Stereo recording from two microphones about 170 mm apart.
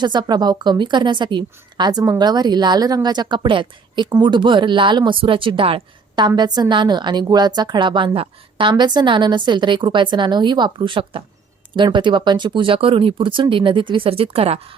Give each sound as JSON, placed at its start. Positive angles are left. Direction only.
{"t": 0.0, "sound": "a woman's voice", "side_deg": -25}